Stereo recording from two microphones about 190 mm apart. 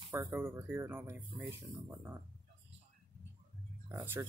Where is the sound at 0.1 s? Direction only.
15° right (ahead or behind).